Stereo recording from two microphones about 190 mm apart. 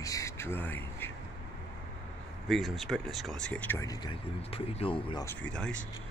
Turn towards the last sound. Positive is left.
turn(degrees=5)  # may be behind; listen again after turning